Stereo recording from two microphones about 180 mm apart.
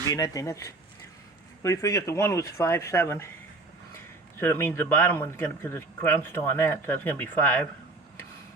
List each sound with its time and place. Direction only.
0.1 s speech: 15° left (ahead or behind)